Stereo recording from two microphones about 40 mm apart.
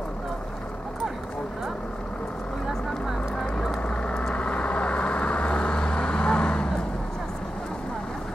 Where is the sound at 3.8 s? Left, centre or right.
Left.